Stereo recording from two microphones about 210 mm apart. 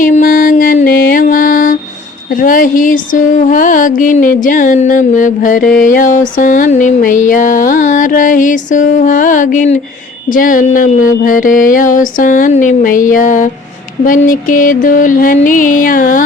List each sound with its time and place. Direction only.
0.0 s music: 40° left (ahead or behind)